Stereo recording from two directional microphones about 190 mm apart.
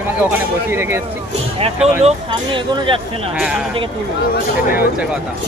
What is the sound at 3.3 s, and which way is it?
Speech, 5° right (ahead or behind).